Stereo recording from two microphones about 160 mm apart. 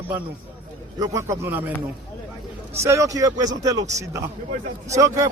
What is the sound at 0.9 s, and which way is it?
Speech, 20° right (ahead or behind).